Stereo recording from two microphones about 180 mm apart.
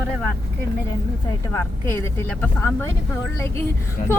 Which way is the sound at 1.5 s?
15° left (ahead or behind).